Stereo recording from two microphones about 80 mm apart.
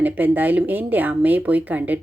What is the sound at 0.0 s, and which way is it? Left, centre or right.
Speech, right.